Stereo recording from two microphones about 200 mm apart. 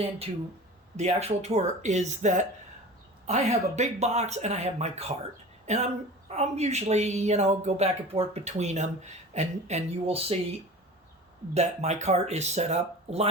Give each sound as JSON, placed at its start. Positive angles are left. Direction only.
{"t": 0.9, "sound": "speech", "side_deg": -35}
{"t": 11.5, "sound": "speech", "side_deg": -35}